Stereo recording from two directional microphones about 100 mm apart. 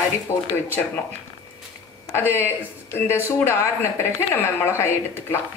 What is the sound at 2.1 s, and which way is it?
Speech, 25° left (ahead or behind).